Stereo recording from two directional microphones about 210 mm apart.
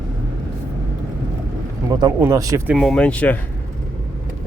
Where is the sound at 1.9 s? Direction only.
15° right (ahead or behind).